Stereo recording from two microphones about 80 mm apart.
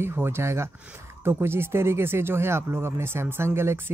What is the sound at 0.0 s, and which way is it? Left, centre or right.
Speech, right.